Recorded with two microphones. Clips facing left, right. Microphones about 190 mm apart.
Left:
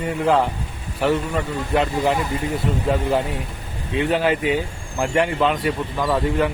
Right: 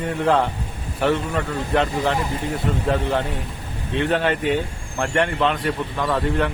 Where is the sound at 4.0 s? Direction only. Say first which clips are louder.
Left 1 dB; 5° left (ahead or behind).